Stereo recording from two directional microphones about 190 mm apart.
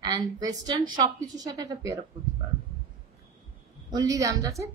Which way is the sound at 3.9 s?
15° right (ahead or behind).